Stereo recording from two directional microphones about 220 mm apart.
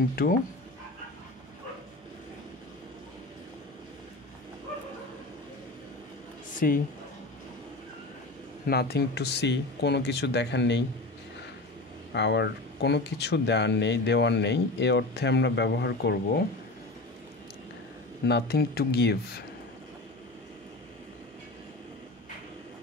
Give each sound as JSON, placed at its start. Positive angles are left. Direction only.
{"t": 0.1, "sound": "speech", "side_deg": 45}
{"t": 6.6, "sound": "speech", "side_deg": 40}
{"t": 8.6, "sound": "speech", "side_deg": 45}
{"t": 12.1, "sound": "speech", "side_deg": 50}
{"t": 18.2, "sound": "speech", "side_deg": 50}